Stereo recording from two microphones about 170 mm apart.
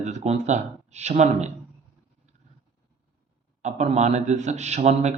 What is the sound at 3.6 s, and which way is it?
Speech, 40° right (ahead or behind).